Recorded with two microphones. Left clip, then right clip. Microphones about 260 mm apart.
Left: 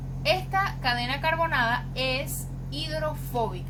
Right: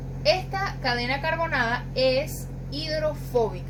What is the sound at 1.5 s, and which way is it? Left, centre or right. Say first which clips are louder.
Speech: even; centre.